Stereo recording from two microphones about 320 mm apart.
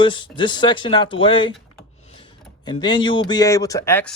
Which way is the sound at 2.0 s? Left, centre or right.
Centre.